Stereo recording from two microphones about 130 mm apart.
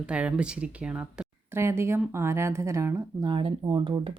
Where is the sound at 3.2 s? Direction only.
40° right (ahead or behind).